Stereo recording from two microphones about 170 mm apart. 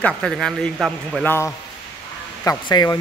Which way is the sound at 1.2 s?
15° left (ahead or behind).